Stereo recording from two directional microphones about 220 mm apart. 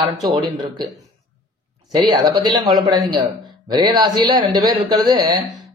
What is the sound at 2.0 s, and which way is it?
Speech, 20° right (ahead or behind).